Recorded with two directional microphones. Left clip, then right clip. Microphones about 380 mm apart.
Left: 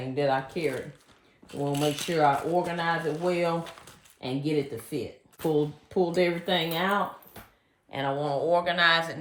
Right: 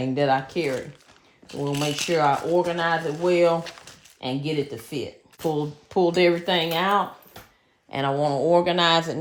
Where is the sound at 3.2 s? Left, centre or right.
Centre.